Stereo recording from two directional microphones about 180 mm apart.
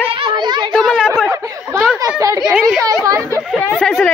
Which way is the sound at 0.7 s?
Centre (ahead or behind).